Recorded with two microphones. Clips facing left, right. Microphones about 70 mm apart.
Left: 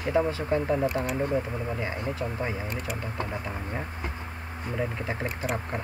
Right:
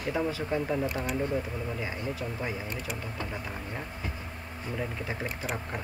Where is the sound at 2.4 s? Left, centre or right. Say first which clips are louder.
Left 3 dB; left.